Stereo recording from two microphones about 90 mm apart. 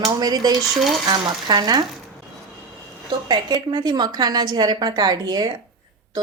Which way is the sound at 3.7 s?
50° right (ahead or behind).